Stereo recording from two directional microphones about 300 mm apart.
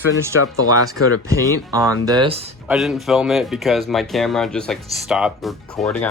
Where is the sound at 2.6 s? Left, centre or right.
Centre.